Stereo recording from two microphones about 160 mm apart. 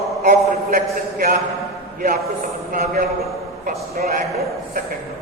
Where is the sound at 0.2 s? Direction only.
65° right (ahead or behind).